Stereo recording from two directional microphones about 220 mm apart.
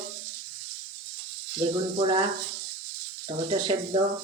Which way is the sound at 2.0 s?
25° right (ahead or behind).